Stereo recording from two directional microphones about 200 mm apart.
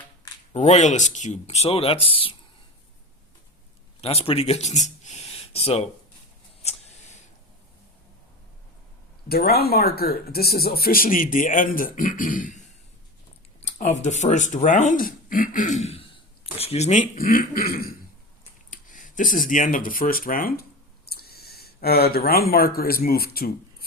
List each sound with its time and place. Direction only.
0.5 s speech: 35° left (ahead or behind)
4.0 s speech: 30° left (ahead or behind)
6.6 s a sound: 35° left (ahead or behind)
9.3 s speech: 50° left (ahead or behind)
13.6 s a sound: 35° left (ahead or behind)
13.9 s speech: 35° left (ahead or behind)